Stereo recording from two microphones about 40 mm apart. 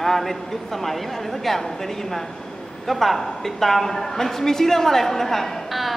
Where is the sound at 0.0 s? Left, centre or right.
Centre.